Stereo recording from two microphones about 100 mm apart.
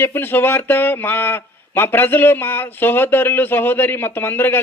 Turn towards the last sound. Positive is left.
turn(degrees=20)  # may be behind; listen again after turning